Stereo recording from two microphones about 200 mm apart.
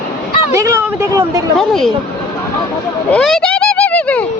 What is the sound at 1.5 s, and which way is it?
Speech, centre (ahead or behind).